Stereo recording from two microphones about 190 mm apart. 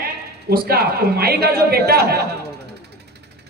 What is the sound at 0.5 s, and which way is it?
A man's voice, 55° right (ahead or behind).